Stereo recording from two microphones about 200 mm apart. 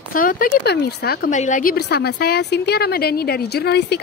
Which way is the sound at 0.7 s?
50° left (ahead or behind).